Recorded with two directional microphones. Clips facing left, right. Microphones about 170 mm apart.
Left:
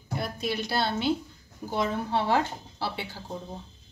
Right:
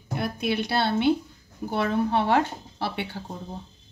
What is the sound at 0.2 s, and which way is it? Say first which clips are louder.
A woman's voice: right 5 dB; 60° right (ahead or behind).